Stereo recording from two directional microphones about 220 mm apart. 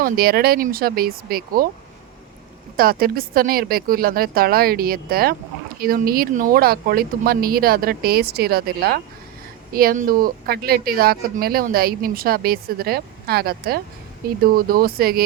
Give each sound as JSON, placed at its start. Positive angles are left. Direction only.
{"t": 0.0, "sound": "speech", "side_deg": -45}
{"t": 2.7, "sound": "speech", "side_deg": -40}